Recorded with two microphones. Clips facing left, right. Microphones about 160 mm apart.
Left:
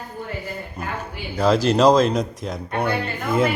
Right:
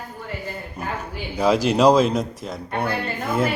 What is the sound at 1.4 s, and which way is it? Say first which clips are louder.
Speech: left 1 dB; 10° right (ahead or behind).